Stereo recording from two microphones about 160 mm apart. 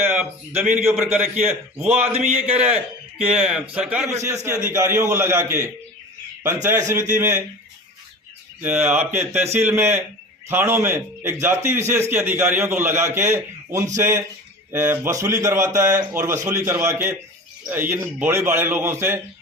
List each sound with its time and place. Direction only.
0.5 s a man's voice: 45° right (ahead or behind)
1.1 s a man's voice: 15° right (ahead or behind)
1.8 s a man's voice: 40° right (ahead or behind)
3.2 s a man's voice: 5° right (ahead or behind)
8.6 s a man's voice: 15° right (ahead or behind)